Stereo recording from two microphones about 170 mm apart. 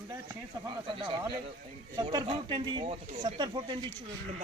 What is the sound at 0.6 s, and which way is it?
Speech, 30° right (ahead or behind).